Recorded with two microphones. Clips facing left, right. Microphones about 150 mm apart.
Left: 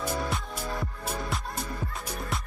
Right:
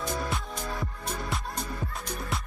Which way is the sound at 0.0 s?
5° left (ahead or behind).